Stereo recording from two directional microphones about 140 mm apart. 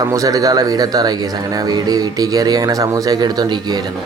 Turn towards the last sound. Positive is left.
turn(degrees=-30)  # may be behind; listen again after turning